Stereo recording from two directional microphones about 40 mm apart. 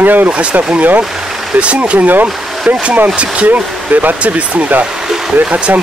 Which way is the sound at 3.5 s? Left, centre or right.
Right.